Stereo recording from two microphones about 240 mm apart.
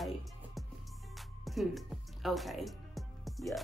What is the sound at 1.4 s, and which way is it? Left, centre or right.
Speech, centre.